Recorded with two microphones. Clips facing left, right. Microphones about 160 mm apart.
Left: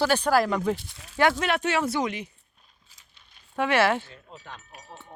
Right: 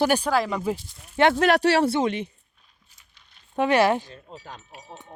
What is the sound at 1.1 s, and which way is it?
Speech, 25° right (ahead or behind).